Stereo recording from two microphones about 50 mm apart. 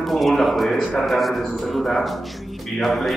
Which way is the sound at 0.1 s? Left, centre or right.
Centre.